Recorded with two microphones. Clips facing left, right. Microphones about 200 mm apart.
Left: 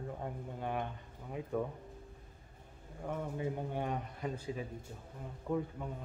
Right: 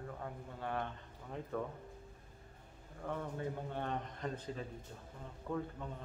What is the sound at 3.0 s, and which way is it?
A man's voice, 10° left (ahead or behind).